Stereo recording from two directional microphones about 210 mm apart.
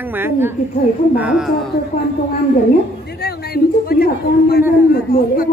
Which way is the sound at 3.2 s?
50° left (ahead or behind).